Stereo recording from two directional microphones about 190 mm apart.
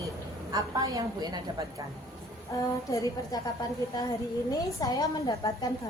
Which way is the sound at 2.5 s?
15° left (ahead or behind).